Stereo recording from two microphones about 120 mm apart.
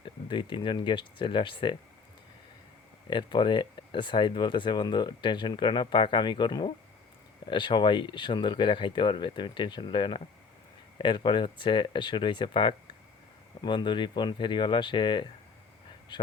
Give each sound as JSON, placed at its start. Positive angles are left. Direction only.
{"t": 0.0, "sound": "speech", "side_deg": 40}
{"t": 3.1, "sound": "speech", "side_deg": 40}